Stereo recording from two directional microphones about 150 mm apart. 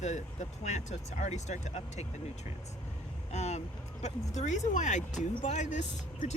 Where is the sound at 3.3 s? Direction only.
50° left (ahead or behind).